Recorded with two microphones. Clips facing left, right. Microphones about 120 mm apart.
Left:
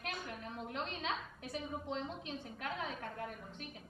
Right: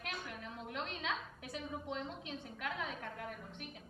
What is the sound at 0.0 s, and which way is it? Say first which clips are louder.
A woman's voice: left 1 dB; 35° left (ahead or behind).